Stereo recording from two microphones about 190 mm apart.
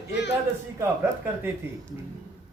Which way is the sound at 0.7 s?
10° right (ahead or behind).